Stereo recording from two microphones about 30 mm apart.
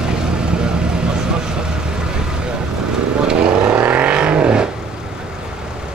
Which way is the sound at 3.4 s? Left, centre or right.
Right.